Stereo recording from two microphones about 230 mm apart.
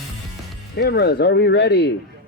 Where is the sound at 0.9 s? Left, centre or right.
Left.